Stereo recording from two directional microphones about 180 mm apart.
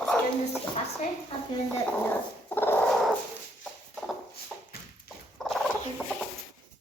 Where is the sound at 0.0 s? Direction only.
Centre (ahead or behind).